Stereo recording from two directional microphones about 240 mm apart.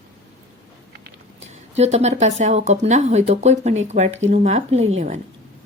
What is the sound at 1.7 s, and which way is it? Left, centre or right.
A woman's voice, right.